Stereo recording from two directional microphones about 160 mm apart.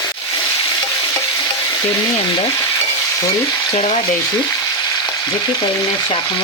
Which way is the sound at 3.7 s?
35° left (ahead or behind).